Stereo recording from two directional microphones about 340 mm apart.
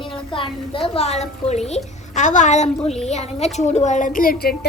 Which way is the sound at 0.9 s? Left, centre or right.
Centre.